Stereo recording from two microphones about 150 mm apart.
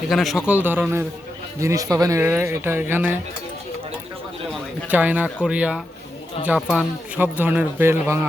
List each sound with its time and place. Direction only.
0.1 s a man's voice: centre (ahead or behind)
4.9 s speech: 10° right (ahead or behind)
7.2 s speech: 15° right (ahead or behind)